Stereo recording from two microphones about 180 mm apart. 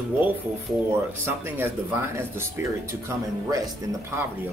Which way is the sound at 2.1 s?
15° right (ahead or behind).